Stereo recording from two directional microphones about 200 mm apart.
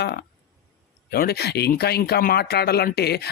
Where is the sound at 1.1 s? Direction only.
50° left (ahead or behind).